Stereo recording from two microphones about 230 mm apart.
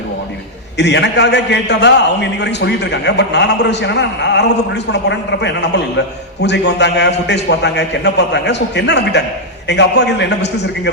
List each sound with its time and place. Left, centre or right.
0.8 s a man's voice: left